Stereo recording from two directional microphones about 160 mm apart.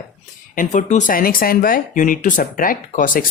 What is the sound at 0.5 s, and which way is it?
Speech, 55° left (ahead or behind).